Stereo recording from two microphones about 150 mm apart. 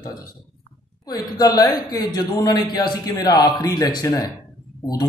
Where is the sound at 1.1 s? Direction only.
25° left (ahead or behind).